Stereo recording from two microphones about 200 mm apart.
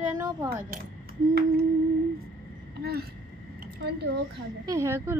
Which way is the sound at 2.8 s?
50° right (ahead or behind).